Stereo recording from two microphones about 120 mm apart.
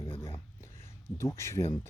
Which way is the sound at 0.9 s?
20° left (ahead or behind).